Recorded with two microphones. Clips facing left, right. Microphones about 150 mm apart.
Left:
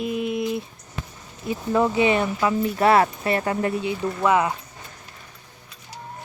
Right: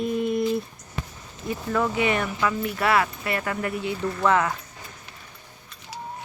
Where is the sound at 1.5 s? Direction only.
20° left (ahead or behind).